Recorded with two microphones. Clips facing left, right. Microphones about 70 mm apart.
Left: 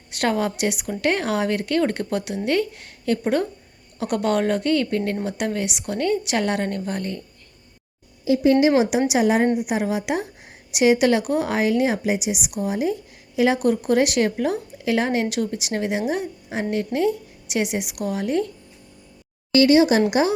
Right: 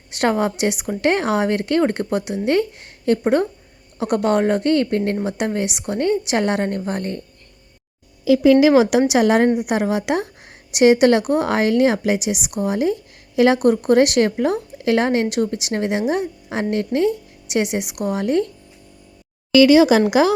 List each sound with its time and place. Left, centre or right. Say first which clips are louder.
0.2 s a woman's voice: right 3 dB; right
8.7 s speech: right 5 dB; right
9.0 s a woman's voice: right 3 dB; right
9.6 s a woman's voice: right 3 dB; right
13.6 s speech: right 5 dB; right
15.3 s speech: right 4 dB; right
18.2 s speech: right 4 dB; right
20.1 s speech: right 4 dB; right